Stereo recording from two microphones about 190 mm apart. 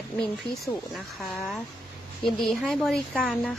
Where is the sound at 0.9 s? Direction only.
Centre (ahead or behind).